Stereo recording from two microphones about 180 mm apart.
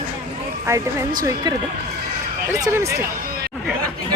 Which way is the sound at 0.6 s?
15° right (ahead or behind).